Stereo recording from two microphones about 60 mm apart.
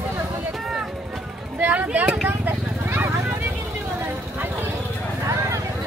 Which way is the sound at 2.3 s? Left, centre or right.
Right.